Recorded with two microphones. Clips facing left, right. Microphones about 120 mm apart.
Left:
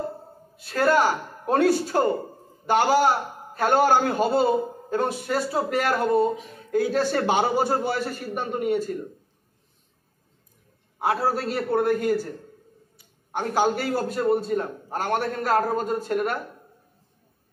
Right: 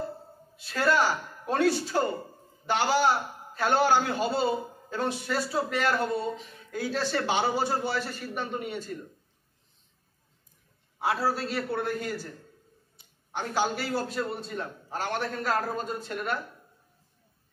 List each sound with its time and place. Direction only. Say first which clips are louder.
0.6 s a man's voice: left 5 dB; 50° left (ahead or behind)
11.0 s a man's voice: left 4 dB; 50° left (ahead or behind)